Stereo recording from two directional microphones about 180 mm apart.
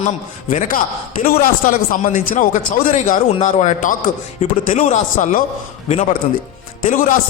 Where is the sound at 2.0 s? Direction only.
45° left (ahead or behind).